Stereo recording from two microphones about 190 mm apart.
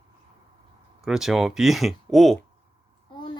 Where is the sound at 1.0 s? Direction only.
Centre (ahead or behind).